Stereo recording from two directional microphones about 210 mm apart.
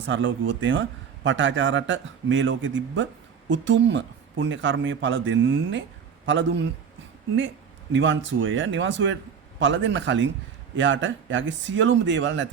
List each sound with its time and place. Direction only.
0.0 s a man's voice: 60° right (ahead or behind)
7.9 s a man's voice: 60° right (ahead or behind)